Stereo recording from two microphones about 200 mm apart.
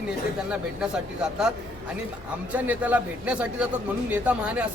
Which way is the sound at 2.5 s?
10° right (ahead or behind).